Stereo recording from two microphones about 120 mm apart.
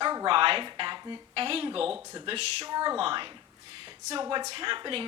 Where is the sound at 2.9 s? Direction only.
50° right (ahead or behind).